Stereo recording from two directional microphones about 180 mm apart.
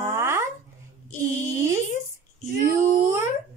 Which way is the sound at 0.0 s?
15° right (ahead or behind).